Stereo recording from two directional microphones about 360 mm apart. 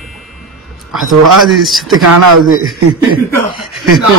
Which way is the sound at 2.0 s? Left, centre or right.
Right.